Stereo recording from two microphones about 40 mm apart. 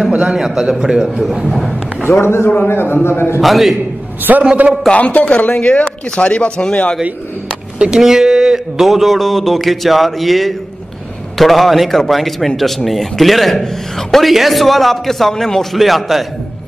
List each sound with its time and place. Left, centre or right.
0.1 s a man's voice: centre
1.4 s speech: centre
2.0 s a man's voice: left
2.7 s a man's voice: left
3.3 s speech: centre
4.3 s a man's voice: right
4.9 s speech: left
5.7 s speech: left
8.0 s speech: centre